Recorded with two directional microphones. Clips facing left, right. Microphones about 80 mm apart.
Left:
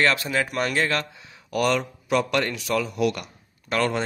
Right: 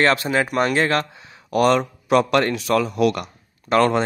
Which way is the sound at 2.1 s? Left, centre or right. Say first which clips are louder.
Right 6 dB; right.